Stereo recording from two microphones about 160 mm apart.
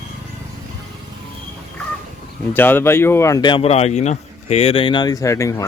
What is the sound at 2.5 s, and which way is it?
Speech, 10° left (ahead or behind).